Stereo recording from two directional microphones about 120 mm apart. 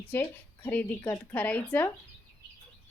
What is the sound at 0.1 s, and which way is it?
A woman's voice, 15° left (ahead or behind).